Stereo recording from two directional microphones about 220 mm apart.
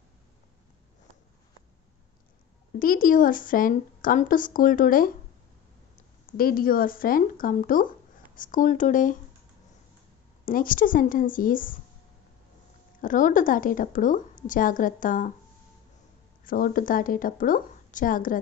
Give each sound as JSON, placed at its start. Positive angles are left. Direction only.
{"t": 2.8, "sound": "a woman's voice", "side_deg": 40}
{"t": 10.4, "sound": "a woman's voice", "side_deg": 40}
{"t": 13.0, "sound": "a woman's voice", "side_deg": 35}
{"t": 16.4, "sound": "a woman's voice", "side_deg": 40}